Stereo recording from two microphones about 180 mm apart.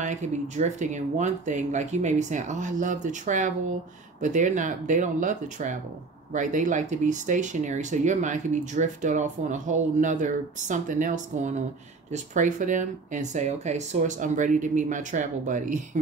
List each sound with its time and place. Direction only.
0.0 s speech: 40° right (ahead or behind)